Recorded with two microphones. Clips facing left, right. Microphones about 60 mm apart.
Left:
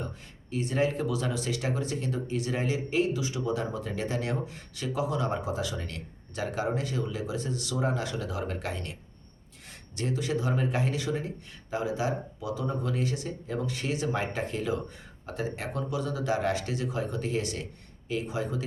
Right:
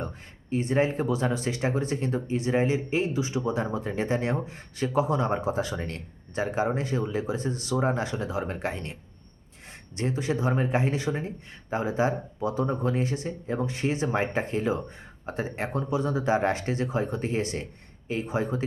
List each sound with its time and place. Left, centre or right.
0.5 s speech: right